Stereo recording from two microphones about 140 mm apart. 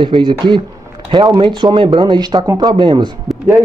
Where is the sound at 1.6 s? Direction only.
35° right (ahead or behind).